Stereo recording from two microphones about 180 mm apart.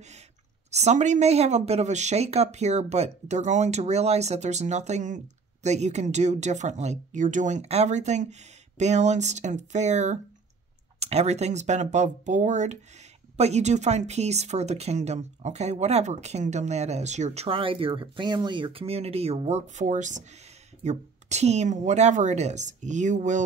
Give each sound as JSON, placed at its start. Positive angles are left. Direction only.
{"t": 0.7, "sound": "speech", "side_deg": -40}